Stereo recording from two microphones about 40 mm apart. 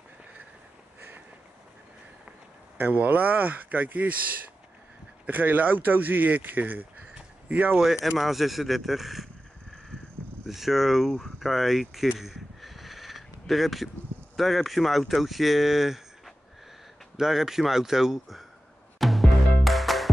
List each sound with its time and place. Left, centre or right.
2.8 s speech: right
5.2 s speech: right
8.2 s speech: centre
10.5 s speech: centre
12.2 s a sound: centre
14.3 s speech: centre
17.2 s speech: centre
18.9 s music: centre